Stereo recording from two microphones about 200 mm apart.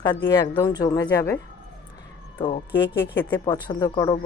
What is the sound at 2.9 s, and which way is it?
Speech, 10° left (ahead or behind).